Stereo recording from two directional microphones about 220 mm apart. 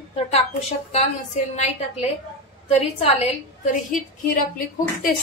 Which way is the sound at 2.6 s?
30° left (ahead or behind).